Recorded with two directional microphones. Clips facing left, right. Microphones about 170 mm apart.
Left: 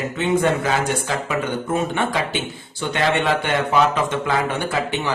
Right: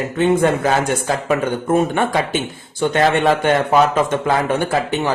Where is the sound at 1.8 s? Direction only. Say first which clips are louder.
Right 5 dB; 45° right (ahead or behind).